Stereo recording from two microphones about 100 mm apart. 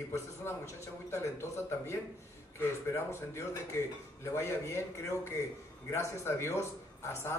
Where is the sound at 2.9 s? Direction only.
25° left (ahead or behind).